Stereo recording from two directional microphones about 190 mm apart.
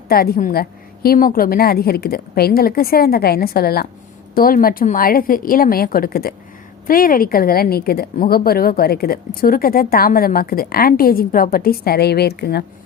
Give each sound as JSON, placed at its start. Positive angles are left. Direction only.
{"t": 0.1, "sound": "a woman's voice", "side_deg": 50}